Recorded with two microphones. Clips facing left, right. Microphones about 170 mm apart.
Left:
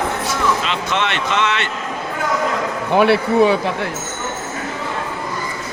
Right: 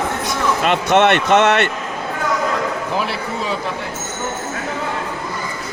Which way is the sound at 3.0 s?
65° left (ahead or behind).